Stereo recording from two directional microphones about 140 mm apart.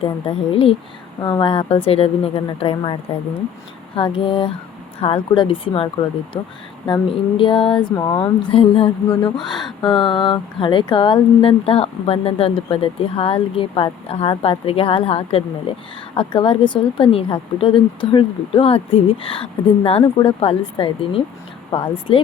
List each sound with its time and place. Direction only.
0.0 s speech: 40° left (ahead or behind)